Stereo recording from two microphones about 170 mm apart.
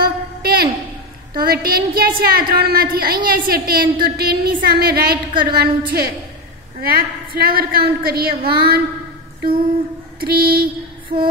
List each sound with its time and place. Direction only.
0.0 s a sound: 65° right (ahead or behind)
1.3 s a woman's voice: 65° right (ahead or behind)
5.1 s speech: 30° right (ahead or behind)
5.5 s a woman's voice: 65° right (ahead or behind)
10.2 s a woman's voice: 65° right (ahead or behind)